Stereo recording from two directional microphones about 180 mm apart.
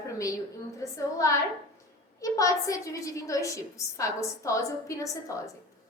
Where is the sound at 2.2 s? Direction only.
20° left (ahead or behind).